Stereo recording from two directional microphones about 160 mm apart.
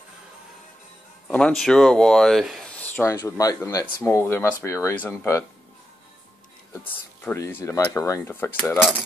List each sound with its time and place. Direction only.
1.2 s speech: 5° left (ahead or behind)
7.2 s speech: 15° left (ahead or behind)